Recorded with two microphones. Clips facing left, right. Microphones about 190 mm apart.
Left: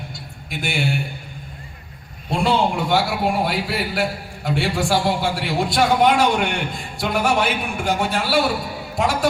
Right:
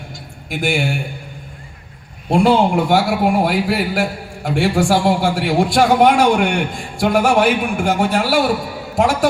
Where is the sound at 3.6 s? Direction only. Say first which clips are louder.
Right 5 dB; 50° right (ahead or behind).